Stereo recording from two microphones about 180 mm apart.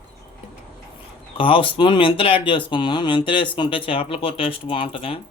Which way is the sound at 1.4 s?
30° left (ahead or behind).